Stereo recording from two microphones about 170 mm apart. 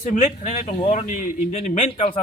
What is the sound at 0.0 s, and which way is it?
A man's voice, 40° left (ahead or behind).